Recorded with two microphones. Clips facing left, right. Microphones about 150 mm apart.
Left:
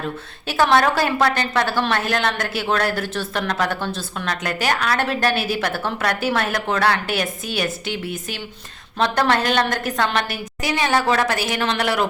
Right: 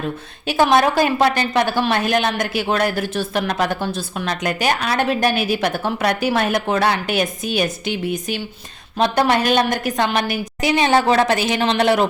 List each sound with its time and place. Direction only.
0.4 s a woman's voice: 15° right (ahead or behind)